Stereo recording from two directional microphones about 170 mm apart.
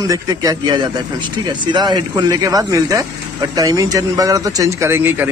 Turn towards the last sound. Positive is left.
turn(degrees=-10)  # may be behind; listen again after turning